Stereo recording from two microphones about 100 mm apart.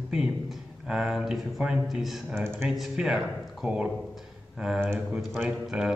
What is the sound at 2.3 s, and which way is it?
Speech, 25° right (ahead or behind).